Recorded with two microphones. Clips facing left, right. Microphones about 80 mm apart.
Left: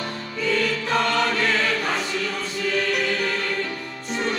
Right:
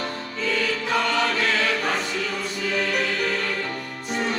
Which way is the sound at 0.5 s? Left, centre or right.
Centre.